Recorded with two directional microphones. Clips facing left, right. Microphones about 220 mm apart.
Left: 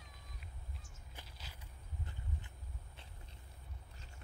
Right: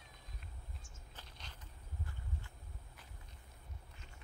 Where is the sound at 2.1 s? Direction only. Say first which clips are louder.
Left 1 dB; 20° left (ahead or behind).